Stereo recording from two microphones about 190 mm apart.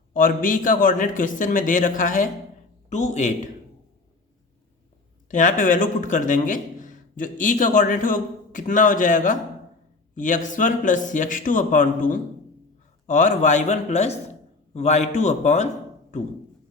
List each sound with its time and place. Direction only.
0.1 s a man's voice: 45° left (ahead or behind)
5.3 s a man's voice: 40° left (ahead or behind)